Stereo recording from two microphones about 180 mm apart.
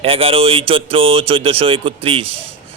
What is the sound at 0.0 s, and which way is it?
Speech, 30° right (ahead or behind).